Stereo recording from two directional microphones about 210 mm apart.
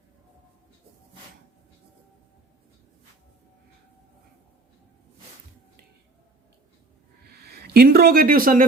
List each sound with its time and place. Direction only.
7.3 s speech: 50° right (ahead or behind)